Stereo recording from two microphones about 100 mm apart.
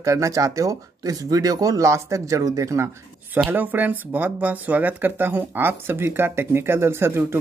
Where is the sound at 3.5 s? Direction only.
20° right (ahead or behind).